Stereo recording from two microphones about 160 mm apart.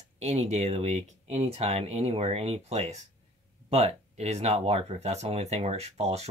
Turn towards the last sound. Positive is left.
turn(degrees=-40)  # may be behind; listen again after turning